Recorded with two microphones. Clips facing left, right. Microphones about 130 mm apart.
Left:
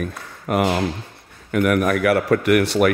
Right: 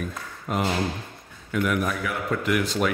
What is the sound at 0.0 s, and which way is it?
A man's voice, 65° left (ahead or behind).